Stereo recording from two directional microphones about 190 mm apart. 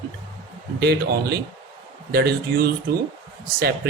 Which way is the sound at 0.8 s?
55° right (ahead or behind).